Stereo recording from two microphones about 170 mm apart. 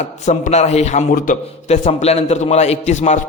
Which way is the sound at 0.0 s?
40° left (ahead or behind).